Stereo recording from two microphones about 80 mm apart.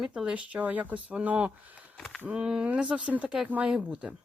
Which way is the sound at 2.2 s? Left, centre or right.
Centre.